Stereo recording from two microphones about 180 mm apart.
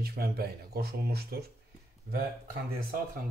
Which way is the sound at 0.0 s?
60° right (ahead or behind).